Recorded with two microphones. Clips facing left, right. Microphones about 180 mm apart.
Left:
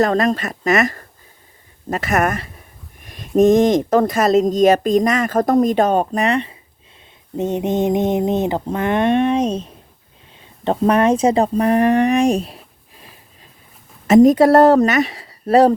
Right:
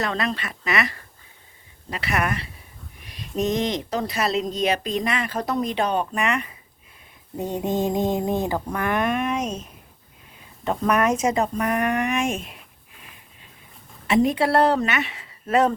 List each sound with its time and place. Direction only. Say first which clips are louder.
0.0 s speech: left 10 dB; 45° left (ahead or behind)